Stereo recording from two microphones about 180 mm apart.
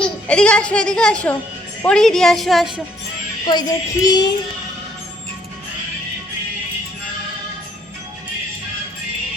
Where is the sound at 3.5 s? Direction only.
25° left (ahead or behind).